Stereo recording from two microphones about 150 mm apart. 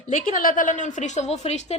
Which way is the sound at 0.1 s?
65° left (ahead or behind).